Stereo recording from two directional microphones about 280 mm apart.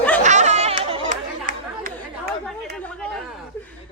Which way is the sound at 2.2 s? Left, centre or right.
Centre.